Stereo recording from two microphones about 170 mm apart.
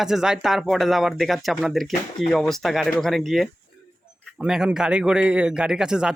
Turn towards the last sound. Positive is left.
turn(degrees=-5)  # may be behind; listen again after turning